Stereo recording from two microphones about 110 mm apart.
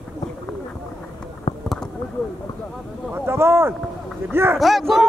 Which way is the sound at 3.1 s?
20° right (ahead or behind).